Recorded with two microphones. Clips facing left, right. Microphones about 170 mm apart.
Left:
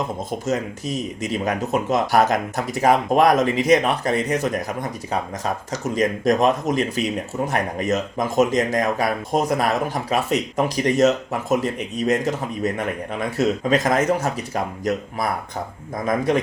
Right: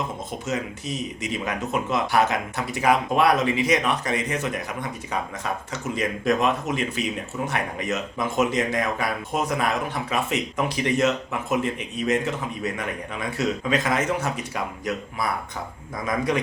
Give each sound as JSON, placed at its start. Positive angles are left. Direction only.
{"t": 0.3, "sound": "a man's voice", "side_deg": 40}